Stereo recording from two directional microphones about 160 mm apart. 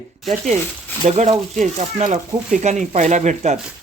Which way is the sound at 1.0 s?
45° right (ahead or behind).